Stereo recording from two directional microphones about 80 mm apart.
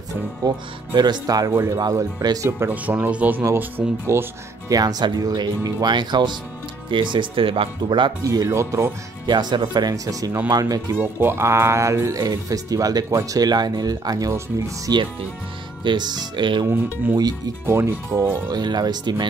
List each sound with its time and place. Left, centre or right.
0.5 s speech: right
2.7 s speech: right
4.6 s speech: right
6.9 s speech: right
8.2 s speech: right
9.2 s speech: right
10.0 s speech: right
10.9 s speech: right
12.2 s speech: right
15.8 s speech: right
16.6 s speech: right
18.5 s speech: right